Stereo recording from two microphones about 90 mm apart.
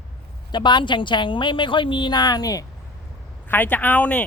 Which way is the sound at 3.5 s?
20° left (ahead or behind).